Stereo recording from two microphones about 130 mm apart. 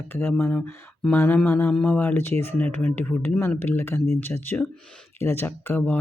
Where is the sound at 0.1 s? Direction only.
15° left (ahead or behind).